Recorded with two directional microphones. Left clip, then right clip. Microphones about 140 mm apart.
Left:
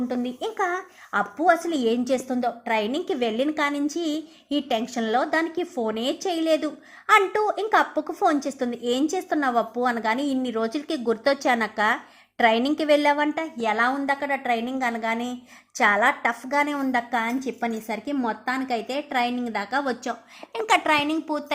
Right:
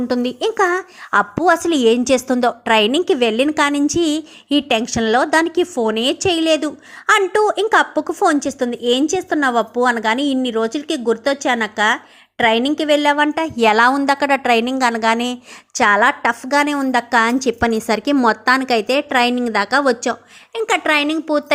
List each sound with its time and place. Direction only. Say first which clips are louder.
0.1 s a woman's voice: right 10 dB; 35° right (ahead or behind)
1.6 s a woman's voice: right 10 dB; 30° right (ahead or behind)
13.4 s a woman's voice: right 10 dB; 45° right (ahead or behind)
20.5 s a woman's voice: right 4 dB; 15° right (ahead or behind); by 21.4 s 35° right (ahead or behind)